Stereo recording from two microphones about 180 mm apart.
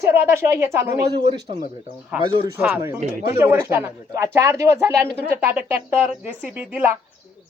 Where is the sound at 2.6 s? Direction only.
5° right (ahead or behind).